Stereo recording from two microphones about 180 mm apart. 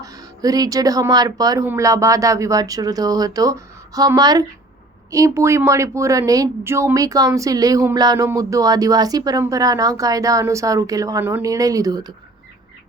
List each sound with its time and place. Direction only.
0.0 s speech: 20° right (ahead or behind)